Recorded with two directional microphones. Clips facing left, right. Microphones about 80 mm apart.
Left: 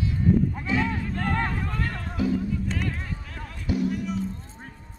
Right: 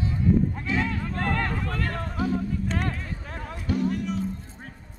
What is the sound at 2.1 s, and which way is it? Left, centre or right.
Music, right.